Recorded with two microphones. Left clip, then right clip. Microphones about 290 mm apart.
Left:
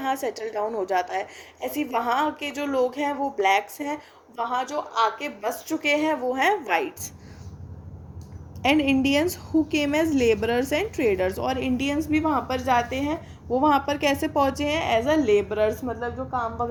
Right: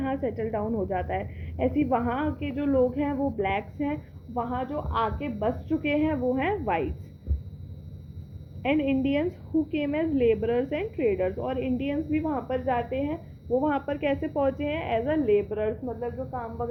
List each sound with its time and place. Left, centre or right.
0.0 s a woman's voice: left
8.6 s a woman's voice: left